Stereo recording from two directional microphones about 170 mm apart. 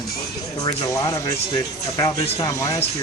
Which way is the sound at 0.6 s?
20° left (ahead or behind).